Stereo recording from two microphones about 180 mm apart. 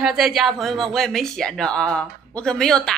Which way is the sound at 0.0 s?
Centre (ahead or behind).